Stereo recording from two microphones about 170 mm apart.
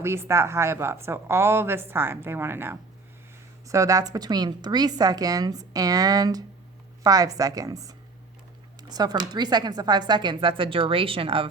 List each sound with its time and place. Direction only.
0.0 s a woman's voice: 15° right (ahead or behind); by 11.4 s 30° right (ahead or behind)